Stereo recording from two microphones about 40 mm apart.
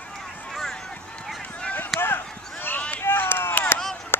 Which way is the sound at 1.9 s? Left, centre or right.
Left.